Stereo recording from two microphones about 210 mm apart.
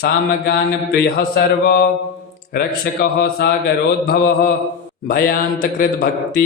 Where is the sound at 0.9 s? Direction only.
50° left (ahead or behind).